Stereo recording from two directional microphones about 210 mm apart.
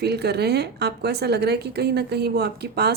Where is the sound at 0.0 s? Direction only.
50° right (ahead or behind).